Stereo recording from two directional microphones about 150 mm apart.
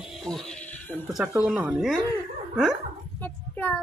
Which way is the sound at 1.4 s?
Centre (ahead or behind).